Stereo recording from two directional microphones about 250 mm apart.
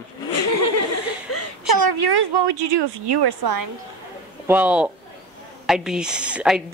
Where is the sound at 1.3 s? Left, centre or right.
Left.